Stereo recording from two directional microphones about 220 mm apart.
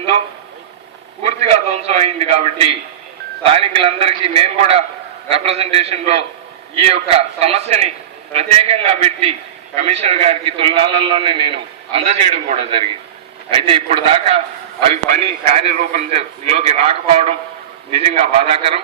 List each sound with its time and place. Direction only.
1.2 s a man's voice: 30° right (ahead or behind)